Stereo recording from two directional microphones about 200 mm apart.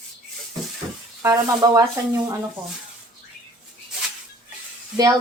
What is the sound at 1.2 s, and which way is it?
Speech, 15° right (ahead or behind).